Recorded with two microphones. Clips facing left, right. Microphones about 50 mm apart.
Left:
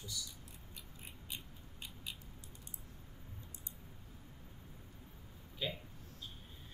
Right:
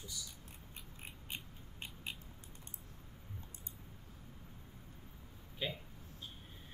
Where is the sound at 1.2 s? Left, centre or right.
Right.